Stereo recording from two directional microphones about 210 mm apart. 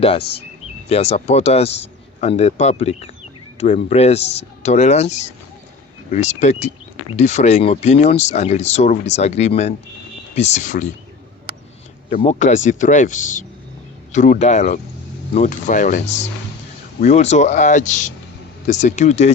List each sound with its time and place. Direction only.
0.2 s speech: 50° left (ahead or behind)
0.9 s speech: 30° left (ahead or behind)
12.1 s speech: 35° left (ahead or behind)